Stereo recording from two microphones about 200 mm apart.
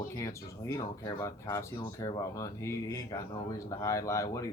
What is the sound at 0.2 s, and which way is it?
Speech, 15° left (ahead or behind).